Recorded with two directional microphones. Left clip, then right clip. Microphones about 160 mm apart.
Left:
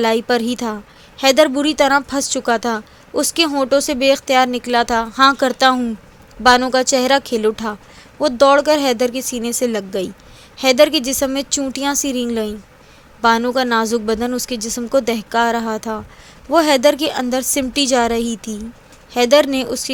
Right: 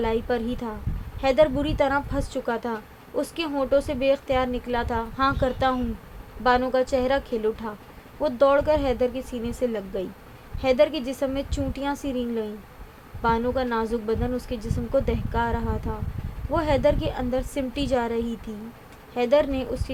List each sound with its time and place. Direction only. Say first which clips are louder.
0.0 s a woman's voice: left 9 dB; 50° left (ahead or behind)